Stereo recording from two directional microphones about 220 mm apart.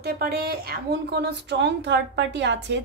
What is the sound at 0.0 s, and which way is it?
A woman's voice, 45° right (ahead or behind).